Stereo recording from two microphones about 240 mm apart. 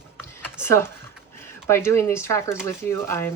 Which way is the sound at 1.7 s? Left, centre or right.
Centre.